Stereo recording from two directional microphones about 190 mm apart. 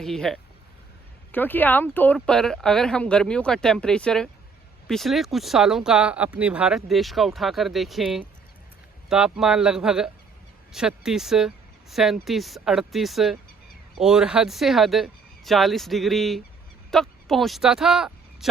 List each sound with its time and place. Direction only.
0.0 s speech: centre (ahead or behind)